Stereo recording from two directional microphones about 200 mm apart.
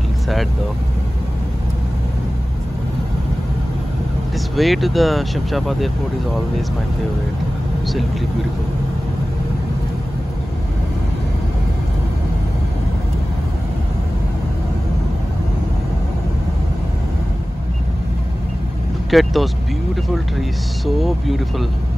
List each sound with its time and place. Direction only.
4.6 s speech: centre (ahead or behind)
19.0 s speech: centre (ahead or behind)